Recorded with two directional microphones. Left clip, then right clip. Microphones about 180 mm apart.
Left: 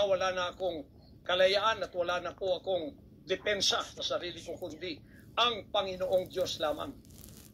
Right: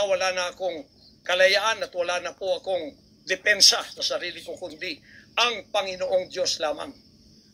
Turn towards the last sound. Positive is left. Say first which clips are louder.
# right 6 dB
turn(degrees=-15)  # may be behind; listen again after turning